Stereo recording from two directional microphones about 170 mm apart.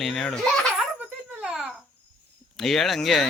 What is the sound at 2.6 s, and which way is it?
Speech, centre (ahead or behind).